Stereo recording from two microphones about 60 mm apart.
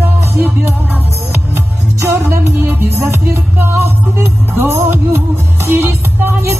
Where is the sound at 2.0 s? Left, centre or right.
Right.